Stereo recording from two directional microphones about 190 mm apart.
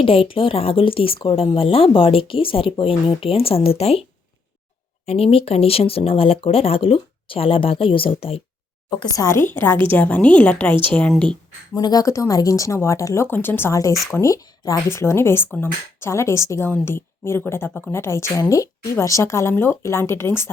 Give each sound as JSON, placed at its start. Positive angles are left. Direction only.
{"t": 0.0, "sound": "speech", "side_deg": 30}
{"t": 5.0, "sound": "speech", "side_deg": 30}
{"t": 11.7, "sound": "speech", "side_deg": 20}